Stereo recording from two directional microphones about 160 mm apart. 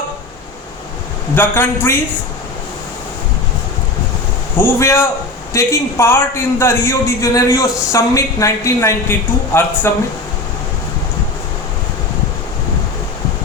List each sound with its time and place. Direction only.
1.4 s a man's voice: 15° left (ahead or behind)
4.5 s a man's voice: 15° left (ahead or behind)